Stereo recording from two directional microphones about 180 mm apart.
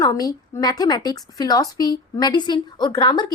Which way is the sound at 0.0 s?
20° left (ahead or behind).